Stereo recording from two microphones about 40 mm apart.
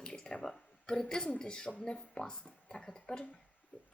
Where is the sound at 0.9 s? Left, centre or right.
Centre.